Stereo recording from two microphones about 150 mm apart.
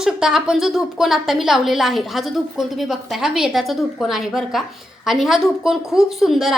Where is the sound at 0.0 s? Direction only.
5° right (ahead or behind).